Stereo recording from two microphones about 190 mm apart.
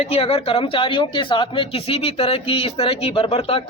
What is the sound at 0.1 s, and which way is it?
A man's voice, 30° left (ahead or behind).